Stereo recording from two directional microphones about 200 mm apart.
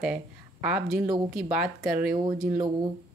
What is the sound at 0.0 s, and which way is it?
A woman's voice, 5° right (ahead or behind).